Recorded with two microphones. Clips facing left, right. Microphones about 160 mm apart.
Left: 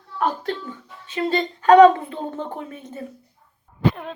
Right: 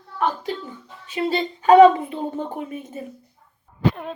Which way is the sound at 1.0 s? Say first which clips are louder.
Even; 10° right (ahead or behind).